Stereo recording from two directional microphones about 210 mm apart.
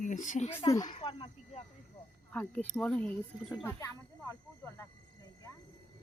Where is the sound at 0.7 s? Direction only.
20° left (ahead or behind).